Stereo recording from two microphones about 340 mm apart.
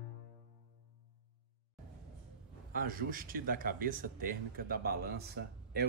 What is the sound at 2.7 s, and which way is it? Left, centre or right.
Speech, right.